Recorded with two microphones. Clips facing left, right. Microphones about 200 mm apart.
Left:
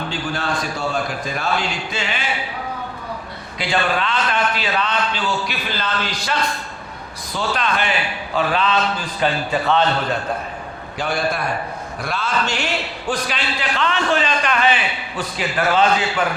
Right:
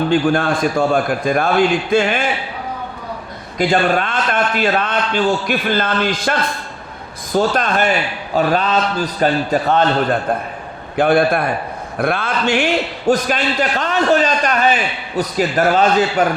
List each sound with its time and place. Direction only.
0.1 s a man's voice: 55° right (ahead or behind)
3.6 s a man's voice: 45° right (ahead or behind)
7.3 s a man's voice: 45° right (ahead or behind)
10.9 s a man's voice: 55° right (ahead or behind); by 16.2 s 40° right (ahead or behind)